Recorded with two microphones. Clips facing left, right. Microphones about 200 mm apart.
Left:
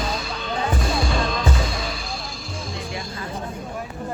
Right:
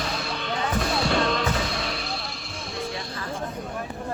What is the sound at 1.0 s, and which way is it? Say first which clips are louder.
Music: right 1 dB; 65° right (ahead or behind).